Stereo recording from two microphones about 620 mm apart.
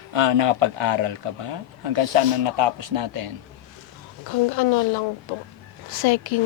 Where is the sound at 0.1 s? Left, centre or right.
Right.